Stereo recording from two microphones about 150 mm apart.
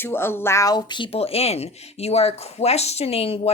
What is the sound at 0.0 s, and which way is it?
A woman's voice, 15° left (ahead or behind).